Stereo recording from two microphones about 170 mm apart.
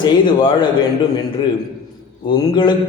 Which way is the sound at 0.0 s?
30° left (ahead or behind).